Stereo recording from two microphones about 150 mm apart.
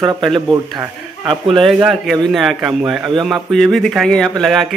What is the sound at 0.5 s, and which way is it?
Speech, 20° right (ahead or behind).